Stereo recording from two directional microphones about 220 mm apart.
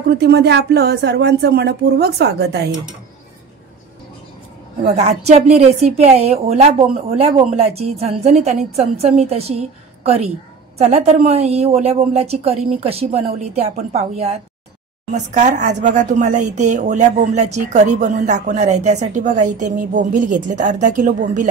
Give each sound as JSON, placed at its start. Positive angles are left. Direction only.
{"t": 0.2, "sound": "a woman's voice", "side_deg": -50}
{"t": 4.8, "sound": "a woman's voice", "side_deg": -30}